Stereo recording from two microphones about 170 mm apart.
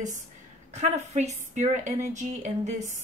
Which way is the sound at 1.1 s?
45° right (ahead or behind).